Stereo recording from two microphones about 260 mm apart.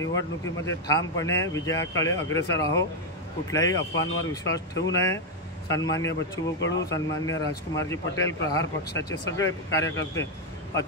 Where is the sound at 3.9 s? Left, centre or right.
Left.